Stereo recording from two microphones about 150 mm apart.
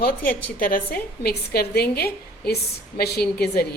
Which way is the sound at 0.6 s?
75° left (ahead or behind).